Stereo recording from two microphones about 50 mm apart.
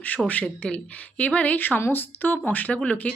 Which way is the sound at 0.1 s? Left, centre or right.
Left.